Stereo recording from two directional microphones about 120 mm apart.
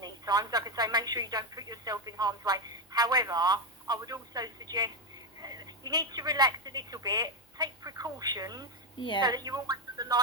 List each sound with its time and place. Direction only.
0.0 s speech: 35° right (ahead or behind)
9.0 s a woman's voice: 45° left (ahead or behind)
9.2 s speech: 30° right (ahead or behind)